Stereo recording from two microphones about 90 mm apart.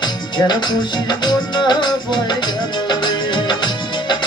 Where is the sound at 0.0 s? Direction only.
55° left (ahead or behind).